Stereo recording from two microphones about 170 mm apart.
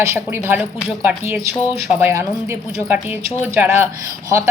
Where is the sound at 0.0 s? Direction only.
15° right (ahead or behind).